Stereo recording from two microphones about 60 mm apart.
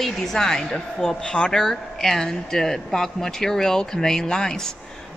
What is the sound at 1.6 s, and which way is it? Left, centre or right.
Speech, centre.